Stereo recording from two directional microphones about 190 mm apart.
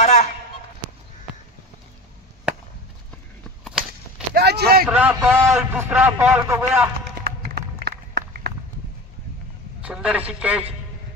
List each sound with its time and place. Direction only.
0.0 s a sound: 35° left (ahead or behind)
4.3 s speech: 60° right (ahead or behind)
4.8 s a man's voice: 10° right (ahead or behind)
7.2 s run: 60° right (ahead or behind)
9.8 s a man's voice: 5° right (ahead or behind)